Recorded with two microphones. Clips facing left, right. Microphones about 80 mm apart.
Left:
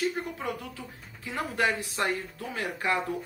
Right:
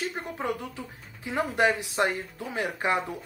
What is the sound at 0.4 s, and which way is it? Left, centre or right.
Speech, right.